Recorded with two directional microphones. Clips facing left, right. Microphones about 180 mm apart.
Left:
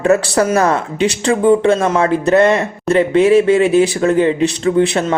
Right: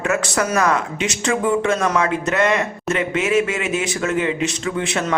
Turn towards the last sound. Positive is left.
turn(degrees=35)  # may be behind; listen again after turning